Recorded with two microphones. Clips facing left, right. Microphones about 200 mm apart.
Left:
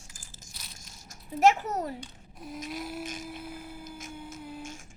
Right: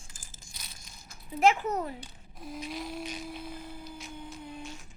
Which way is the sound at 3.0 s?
45° left (ahead or behind).